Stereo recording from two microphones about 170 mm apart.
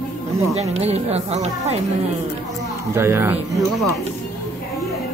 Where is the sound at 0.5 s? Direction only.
40° right (ahead or behind).